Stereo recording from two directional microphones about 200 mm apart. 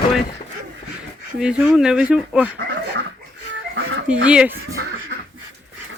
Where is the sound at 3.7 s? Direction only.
70° right (ahead or behind).